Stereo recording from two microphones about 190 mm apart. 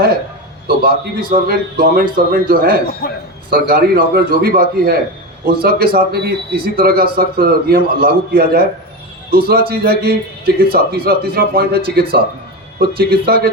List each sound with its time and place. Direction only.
0.8 s a man's voice: 50° right (ahead or behind)
3.0 s a man's voice: 55° left (ahead or behind)
3.5 s a man's voice: 55° right (ahead or behind)